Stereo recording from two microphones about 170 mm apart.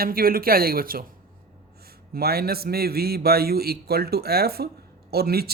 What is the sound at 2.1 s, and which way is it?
A man's voice, 65° right (ahead or behind).